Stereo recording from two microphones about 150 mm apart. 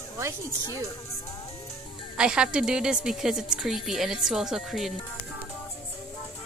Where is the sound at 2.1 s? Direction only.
5° right (ahead or behind).